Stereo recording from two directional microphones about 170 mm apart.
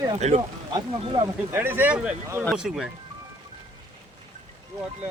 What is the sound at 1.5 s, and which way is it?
Speech, 10° right (ahead or behind).